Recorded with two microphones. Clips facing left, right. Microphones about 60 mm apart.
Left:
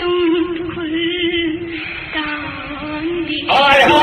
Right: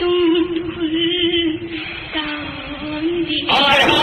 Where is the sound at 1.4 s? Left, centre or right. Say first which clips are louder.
Left 1 dB; left.